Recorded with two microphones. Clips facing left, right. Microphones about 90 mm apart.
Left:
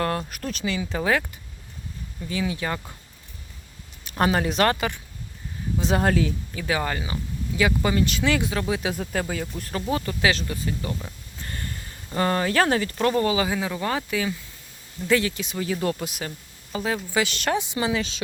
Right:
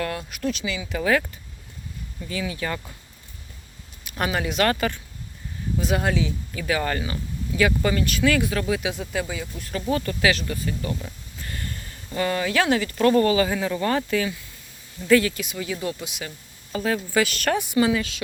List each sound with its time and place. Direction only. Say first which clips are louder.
0.0 s speech: left 1 dB; 40° left (ahead or behind); by 1.2 s 25° left (ahead or behind)
2.3 s speech: left 1 dB; 20° left (ahead or behind)
4.0 s speech: left 4 dB; 35° left (ahead or behind)
6.5 s speech: right 1 dB; 25° left (ahead or behind)
8.9 s speech: left 1 dB; 45° left (ahead or behind)
9.9 s speech: right 1 dB; 25° left (ahead or behind)
12.1 s speech: left 1 dB; 40° left (ahead or behind)
13.1 s speech: right 4 dB; 20° left (ahead or behind)
15.0 s speech: right 4 dB; 25° left (ahead or behind)
15.5 s speech: left 3 dB; 40° left (ahead or behind)
16.7 s speech: right 2 dB; 20° left (ahead or behind)